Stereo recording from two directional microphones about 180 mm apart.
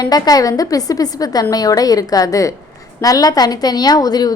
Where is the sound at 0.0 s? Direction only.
20° left (ahead or behind).